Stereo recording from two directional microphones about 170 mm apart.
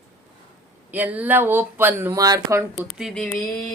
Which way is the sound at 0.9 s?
10° right (ahead or behind).